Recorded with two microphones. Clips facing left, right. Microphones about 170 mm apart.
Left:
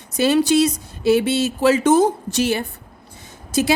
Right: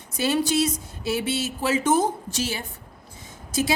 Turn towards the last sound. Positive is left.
turn(degrees=70)  # may be behind; listen again after turning